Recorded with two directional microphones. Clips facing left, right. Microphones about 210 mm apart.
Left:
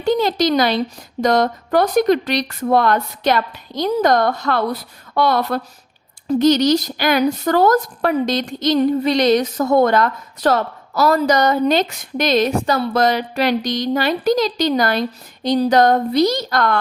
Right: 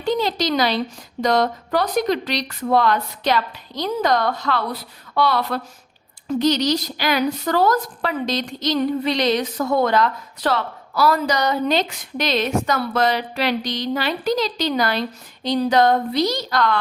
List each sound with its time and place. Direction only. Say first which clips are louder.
0.0 s speech: left 4 dB; 50° left (ahead or behind)